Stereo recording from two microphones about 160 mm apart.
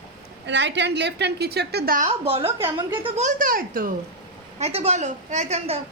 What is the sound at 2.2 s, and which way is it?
Speech, 35° right (ahead or behind).